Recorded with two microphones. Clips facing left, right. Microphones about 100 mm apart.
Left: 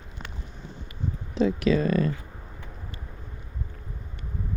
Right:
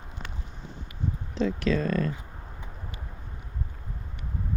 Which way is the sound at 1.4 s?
10° left (ahead or behind).